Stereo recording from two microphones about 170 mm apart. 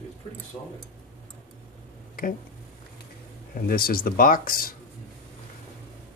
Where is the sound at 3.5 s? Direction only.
60° left (ahead or behind).